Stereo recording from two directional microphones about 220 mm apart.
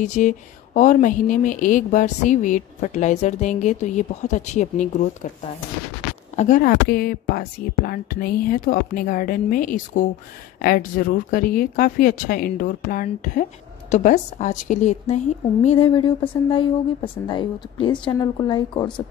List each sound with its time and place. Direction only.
0.0 s speech: 35° left (ahead or behind)